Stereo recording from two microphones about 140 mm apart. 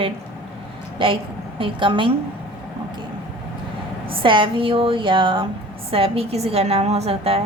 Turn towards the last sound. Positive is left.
turn(degrees=-45)  # may be behind; listen again after turning